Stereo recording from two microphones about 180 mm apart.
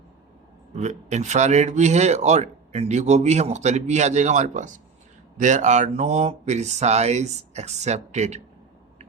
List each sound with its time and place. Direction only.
0.7 s speech: 40° right (ahead or behind)